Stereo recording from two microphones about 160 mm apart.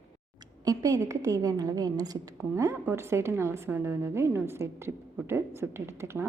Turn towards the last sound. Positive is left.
turn(degrees=-15)  # may be behind; listen again after turning